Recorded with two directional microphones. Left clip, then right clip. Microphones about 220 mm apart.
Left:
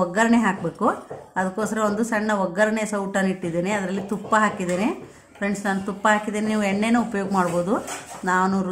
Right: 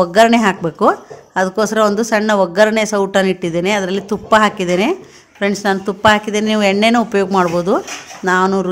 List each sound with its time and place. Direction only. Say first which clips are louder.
0.0 s speech: right 10 dB; 40° right (ahead or behind)